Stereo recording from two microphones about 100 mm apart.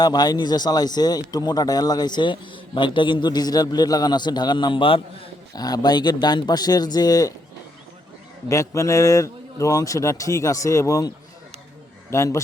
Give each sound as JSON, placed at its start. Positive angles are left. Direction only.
{"t": 0.0, "sound": "speech", "side_deg": 40}
{"t": 5.5, "sound": "a man's voice", "side_deg": 40}
{"t": 8.4, "sound": "a man's voice", "side_deg": 30}
{"t": 12.1, "sound": "a man's voice", "side_deg": 30}